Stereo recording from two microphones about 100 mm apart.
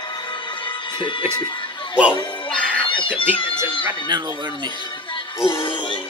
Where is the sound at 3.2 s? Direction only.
60° left (ahead or behind).